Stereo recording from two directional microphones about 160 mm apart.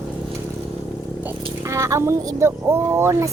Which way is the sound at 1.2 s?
15° right (ahead or behind).